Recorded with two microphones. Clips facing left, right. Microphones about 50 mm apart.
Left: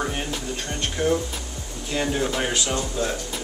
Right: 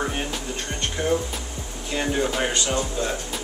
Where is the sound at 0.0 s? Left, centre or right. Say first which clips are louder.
Even; centre.